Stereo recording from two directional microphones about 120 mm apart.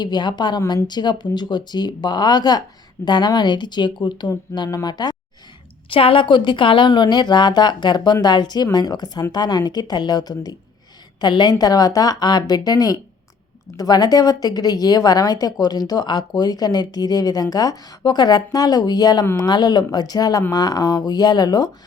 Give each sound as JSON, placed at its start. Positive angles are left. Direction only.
{"t": 0.0, "sound": "speech", "side_deg": 35}
{"t": 5.9, "sound": "speech", "side_deg": 50}